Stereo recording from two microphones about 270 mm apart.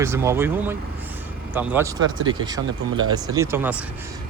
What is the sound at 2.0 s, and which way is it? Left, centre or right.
Speech, right.